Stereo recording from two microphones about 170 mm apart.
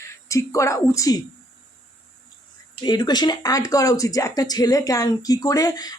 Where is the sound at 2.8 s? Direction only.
25° left (ahead or behind).